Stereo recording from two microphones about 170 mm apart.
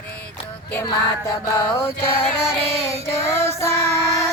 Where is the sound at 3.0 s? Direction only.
15° left (ahead or behind).